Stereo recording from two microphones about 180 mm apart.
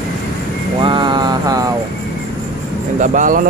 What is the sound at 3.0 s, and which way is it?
Speech, 45° right (ahead or behind).